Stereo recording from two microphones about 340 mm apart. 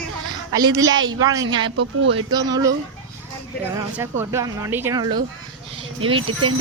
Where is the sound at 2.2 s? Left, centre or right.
Centre.